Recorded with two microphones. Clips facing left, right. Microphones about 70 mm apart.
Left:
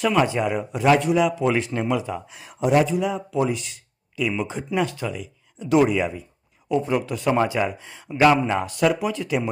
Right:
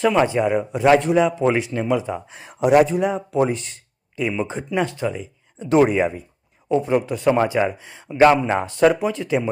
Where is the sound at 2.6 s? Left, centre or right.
Right.